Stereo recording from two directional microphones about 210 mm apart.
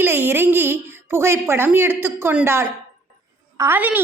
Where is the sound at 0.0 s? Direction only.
10° right (ahead or behind).